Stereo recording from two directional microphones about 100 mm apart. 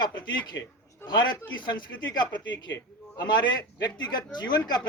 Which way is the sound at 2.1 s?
45° left (ahead or behind).